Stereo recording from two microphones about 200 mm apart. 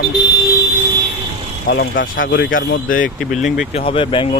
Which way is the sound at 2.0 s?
70° left (ahead or behind).